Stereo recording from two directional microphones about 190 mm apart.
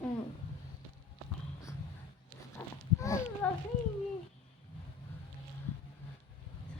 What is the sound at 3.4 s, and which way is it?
Speech, 5° left (ahead or behind).